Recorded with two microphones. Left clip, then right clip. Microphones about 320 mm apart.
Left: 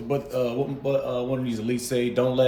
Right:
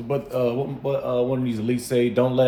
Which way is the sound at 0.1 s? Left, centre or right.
Centre.